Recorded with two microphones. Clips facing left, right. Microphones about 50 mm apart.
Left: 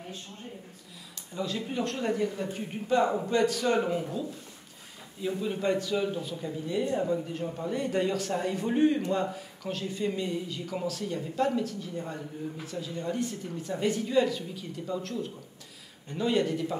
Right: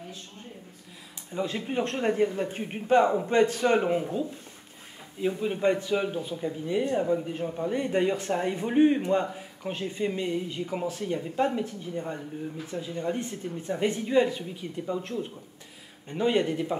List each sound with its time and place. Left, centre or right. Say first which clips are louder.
1.3 s a man's voice: right 3 dB; right
5.4 s a man's voice: right 2 dB; right